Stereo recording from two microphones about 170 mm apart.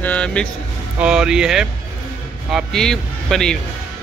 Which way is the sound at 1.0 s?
5° right (ahead or behind).